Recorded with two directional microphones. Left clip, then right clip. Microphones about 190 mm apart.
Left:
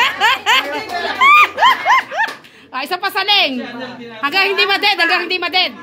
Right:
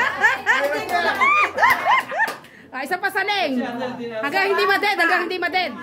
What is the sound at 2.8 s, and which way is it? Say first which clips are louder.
A woman's voice: left 4 dB; 5° right (ahead or behind).